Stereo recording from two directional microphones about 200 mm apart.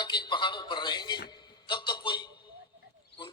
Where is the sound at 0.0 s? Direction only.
20° left (ahead or behind).